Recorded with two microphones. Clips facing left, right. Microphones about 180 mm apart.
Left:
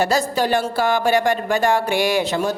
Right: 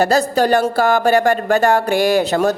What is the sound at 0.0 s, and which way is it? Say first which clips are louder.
Speech: right 4 dB; 40° right (ahead or behind).